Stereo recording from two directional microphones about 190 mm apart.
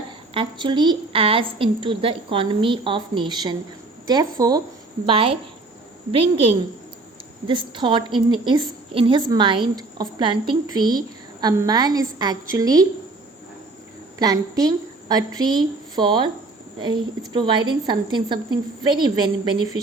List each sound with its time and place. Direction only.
0.3 s a woman's voice: 25° right (ahead or behind)
14.2 s a woman's voice: 20° right (ahead or behind)